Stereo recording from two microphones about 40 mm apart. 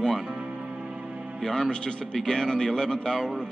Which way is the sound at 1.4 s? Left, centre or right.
Centre.